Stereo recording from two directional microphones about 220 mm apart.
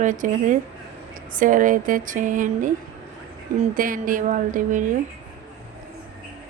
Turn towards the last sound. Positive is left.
turn(degrees=-35)  # may be behind; listen again after turning